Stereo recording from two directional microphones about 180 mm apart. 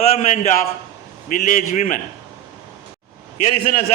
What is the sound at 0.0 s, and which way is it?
A man's voice, 40° left (ahead or behind).